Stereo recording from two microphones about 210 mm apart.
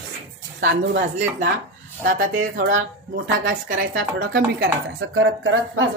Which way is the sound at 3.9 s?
65° right (ahead or behind).